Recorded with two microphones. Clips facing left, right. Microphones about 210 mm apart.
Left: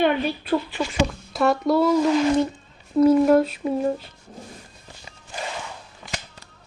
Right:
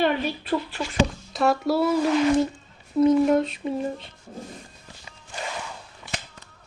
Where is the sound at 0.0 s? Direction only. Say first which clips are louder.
Left 2 dB; centre (ahead or behind).